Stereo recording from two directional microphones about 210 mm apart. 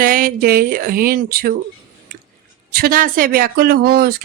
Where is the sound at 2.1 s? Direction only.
45° right (ahead or behind).